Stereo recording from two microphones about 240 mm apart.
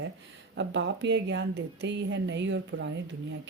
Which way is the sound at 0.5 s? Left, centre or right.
Right.